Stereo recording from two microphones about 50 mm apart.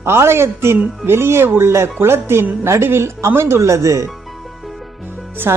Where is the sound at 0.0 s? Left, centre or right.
Right.